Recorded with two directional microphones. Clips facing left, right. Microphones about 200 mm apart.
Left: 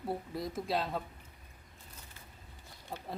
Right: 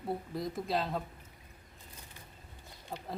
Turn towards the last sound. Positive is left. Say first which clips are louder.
# right 1 dB
turn(degrees=0)  # may be behind; listen again after turning